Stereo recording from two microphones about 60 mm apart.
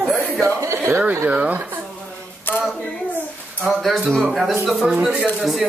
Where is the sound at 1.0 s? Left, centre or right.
Right.